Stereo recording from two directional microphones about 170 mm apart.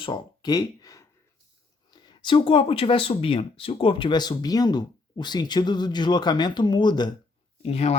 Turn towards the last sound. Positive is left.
turn(degrees=35)  # may be behind; listen again after turning